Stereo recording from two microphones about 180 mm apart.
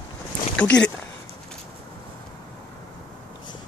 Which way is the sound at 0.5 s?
5° left (ahead or behind).